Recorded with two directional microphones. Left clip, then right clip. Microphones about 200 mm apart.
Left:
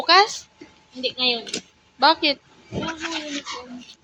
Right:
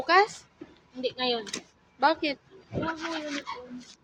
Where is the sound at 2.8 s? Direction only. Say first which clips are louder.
Left 3 dB; 15° left (ahead or behind).